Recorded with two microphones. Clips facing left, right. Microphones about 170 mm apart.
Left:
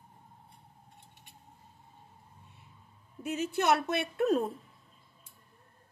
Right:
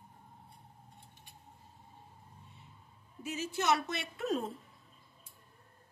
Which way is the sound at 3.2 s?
55° left (ahead or behind).